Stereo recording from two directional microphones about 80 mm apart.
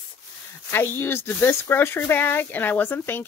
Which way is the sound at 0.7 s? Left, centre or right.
Left.